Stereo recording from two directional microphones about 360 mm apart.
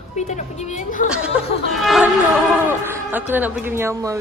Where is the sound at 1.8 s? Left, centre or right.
Centre.